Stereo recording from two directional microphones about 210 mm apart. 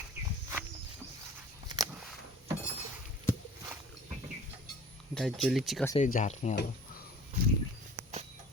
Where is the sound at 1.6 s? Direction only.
20° right (ahead or behind).